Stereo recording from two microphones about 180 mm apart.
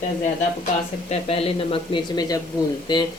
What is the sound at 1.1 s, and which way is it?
Speech, 30° left (ahead or behind).